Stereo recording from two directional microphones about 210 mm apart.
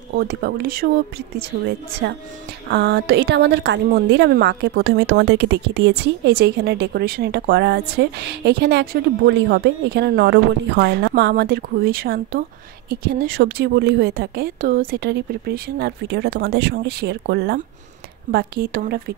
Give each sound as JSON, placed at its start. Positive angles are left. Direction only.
{"t": 0.1, "sound": "a woman's voice", "side_deg": -45}
{"t": 2.0, "sound": "a woman's voice", "side_deg": -50}